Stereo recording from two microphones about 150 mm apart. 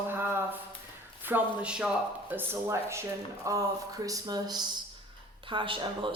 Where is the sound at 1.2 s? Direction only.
10° right (ahead or behind).